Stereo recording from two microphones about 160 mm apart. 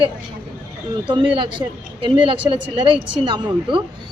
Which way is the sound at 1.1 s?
30° right (ahead or behind).